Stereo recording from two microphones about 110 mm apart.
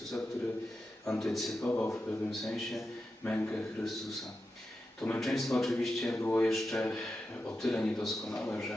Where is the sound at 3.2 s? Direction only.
15° left (ahead or behind).